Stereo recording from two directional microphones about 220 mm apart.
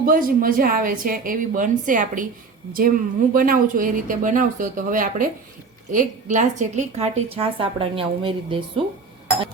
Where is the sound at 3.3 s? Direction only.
40° right (ahead or behind); by 8.8 s 25° right (ahead or behind).